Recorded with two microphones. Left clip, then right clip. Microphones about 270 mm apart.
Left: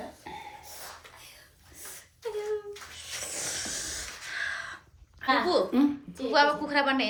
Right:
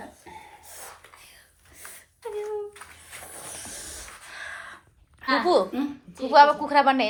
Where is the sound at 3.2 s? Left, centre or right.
Centre.